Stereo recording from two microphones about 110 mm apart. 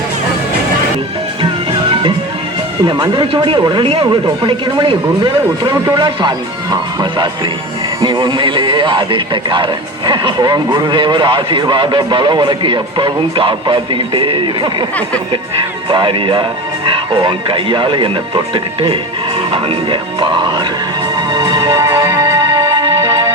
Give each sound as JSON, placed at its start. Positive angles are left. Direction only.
{"t": 1.9, "sound": "music", "side_deg": -50}
{"t": 2.8, "sound": "speech", "side_deg": -50}
{"t": 8.0, "sound": "speech", "side_deg": -45}
{"t": 15.9, "sound": "speech", "side_deg": -50}
{"t": 21.2, "sound": "music", "side_deg": -40}